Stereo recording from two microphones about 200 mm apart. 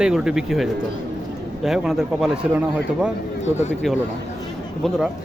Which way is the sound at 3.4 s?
35° left (ahead or behind).